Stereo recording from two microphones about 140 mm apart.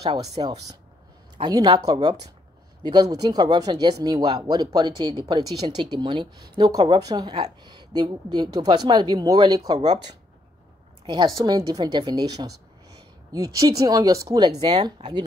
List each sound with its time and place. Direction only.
0.2 s speech: 25° right (ahead or behind)
11.1 s speech: 30° right (ahead or behind)
14.7 s speech: 45° right (ahead or behind)